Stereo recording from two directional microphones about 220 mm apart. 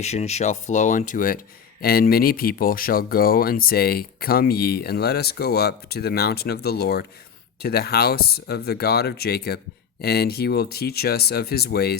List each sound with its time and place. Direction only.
0.0 s speech: 30° left (ahead or behind); by 11.9 s 45° left (ahead or behind)